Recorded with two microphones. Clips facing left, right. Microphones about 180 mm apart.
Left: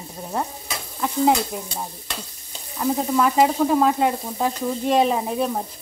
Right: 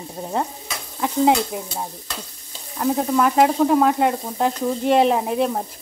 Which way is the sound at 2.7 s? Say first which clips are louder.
Right 1 dB; centre (ahead or behind).